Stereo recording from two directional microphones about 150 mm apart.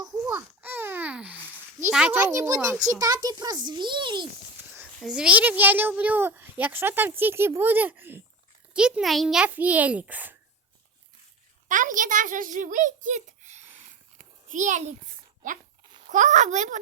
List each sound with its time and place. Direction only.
0.3 s babbling: 15° right (ahead or behind)
1.9 s a child's voice: 5° right (ahead or behind); by 4.3 s 30° right (ahead or behind)
4.9 s a child's voice: 5° right (ahead or behind)
11.7 s a child's voice: 60° right (ahead or behind)
14.2 s a sound: 60° right (ahead or behind)
16.0 s speech: 55° right (ahead or behind)